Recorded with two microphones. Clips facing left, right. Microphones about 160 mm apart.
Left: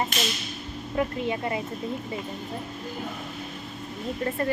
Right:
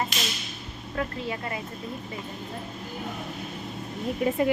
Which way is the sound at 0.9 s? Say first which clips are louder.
Left 4 dB; 20° left (ahead or behind).